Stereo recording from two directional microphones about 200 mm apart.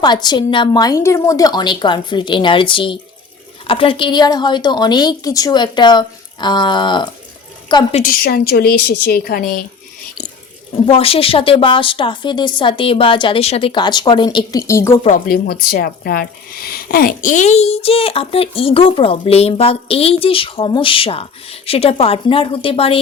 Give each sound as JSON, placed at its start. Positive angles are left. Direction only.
{"t": 0.0, "sound": "speech", "side_deg": 20}
{"t": 7.9, "sound": "a woman's voice", "side_deg": 45}
{"t": 10.8, "sound": "speech", "side_deg": 30}
{"t": 15.3, "sound": "speech", "side_deg": 50}